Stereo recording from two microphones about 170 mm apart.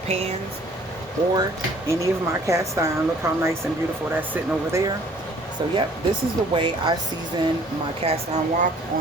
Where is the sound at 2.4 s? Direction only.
20° right (ahead or behind).